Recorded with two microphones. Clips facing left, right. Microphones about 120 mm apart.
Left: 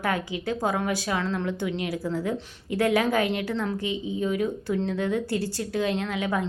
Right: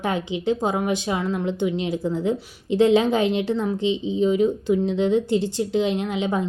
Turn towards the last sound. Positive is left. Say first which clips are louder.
# right 3 dB
turn(degrees=-20)  # may be behind; listen again after turning